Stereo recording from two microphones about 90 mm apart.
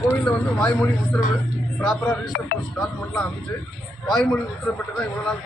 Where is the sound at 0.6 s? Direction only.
15° left (ahead or behind).